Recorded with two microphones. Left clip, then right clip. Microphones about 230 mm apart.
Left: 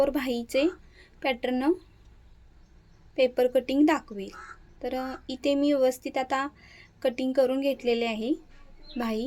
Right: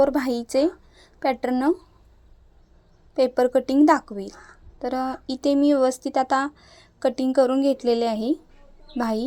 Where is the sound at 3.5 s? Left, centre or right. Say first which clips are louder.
Right 6 dB; centre.